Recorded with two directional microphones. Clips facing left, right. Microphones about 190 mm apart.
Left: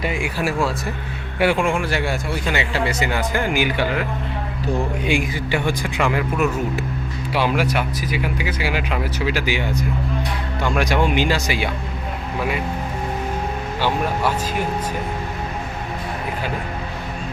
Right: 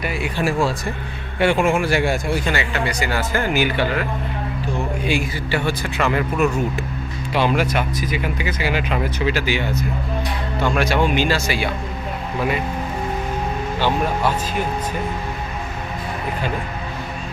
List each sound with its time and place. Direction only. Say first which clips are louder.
0.0 s speech: left 1 dB; 15° left (ahead or behind)
0.3 s a man's voice: right 5 dB; centre (ahead or behind); by 2.3 s 15° right (ahead or behind)
2.6 s speech: left 1 dB; 25° left (ahead or behind)
5.0 s speech: left 1 dB; 15° left (ahead or behind)
13.7 s speech: right 1 dB; 10° left (ahead or behind)